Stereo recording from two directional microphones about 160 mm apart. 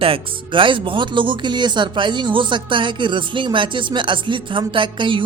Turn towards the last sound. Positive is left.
turn(degrees=-30)  # may be behind; listen again after turning